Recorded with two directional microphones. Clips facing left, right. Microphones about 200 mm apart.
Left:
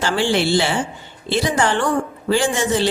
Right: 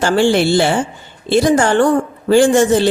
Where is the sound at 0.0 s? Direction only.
45° right (ahead or behind).